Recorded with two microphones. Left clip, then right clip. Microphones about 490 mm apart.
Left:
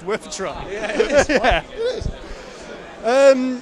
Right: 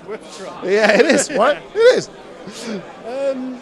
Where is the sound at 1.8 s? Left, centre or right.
Right.